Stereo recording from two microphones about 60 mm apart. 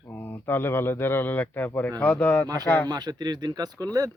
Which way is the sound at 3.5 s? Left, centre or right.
Right.